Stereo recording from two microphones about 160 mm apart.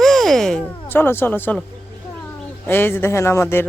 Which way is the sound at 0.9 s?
15° left (ahead or behind).